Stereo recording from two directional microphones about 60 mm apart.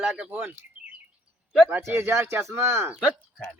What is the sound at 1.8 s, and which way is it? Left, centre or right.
Speech, right.